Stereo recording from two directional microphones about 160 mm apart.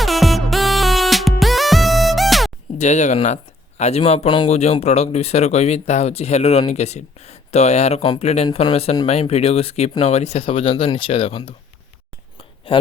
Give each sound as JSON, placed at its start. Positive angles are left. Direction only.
{"t": 0.0, "sound": "music", "side_deg": 0}
{"t": 2.7, "sound": "speech", "side_deg": 45}
{"t": 12.4, "sound": "a sound", "side_deg": 35}